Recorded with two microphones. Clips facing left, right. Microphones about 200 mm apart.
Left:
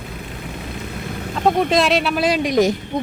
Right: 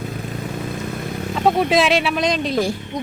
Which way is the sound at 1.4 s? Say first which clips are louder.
Even; centre (ahead or behind).